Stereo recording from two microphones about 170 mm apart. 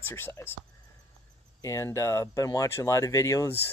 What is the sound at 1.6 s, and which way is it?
Speech, 20° left (ahead or behind).